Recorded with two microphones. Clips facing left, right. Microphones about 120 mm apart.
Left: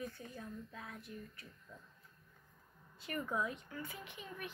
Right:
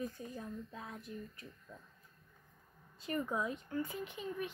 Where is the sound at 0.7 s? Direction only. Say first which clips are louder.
Right 3 dB; 20° right (ahead or behind).